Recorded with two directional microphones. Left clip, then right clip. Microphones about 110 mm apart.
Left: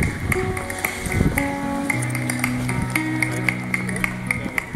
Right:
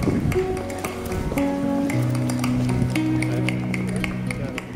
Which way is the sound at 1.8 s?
10° right (ahead or behind).